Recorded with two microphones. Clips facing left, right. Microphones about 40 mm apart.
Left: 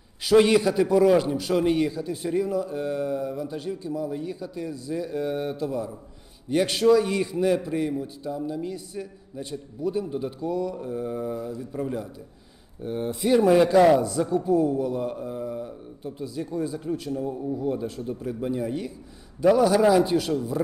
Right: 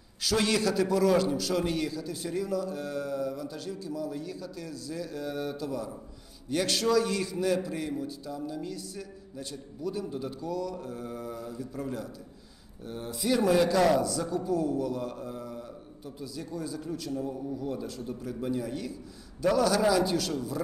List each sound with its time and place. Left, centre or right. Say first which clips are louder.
0.2 s a man's voice: left 9 dB; left